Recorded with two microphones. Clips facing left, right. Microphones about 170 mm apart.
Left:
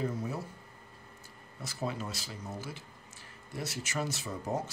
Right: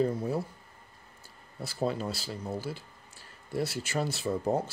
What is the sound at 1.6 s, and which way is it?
Speech, 30° right (ahead or behind).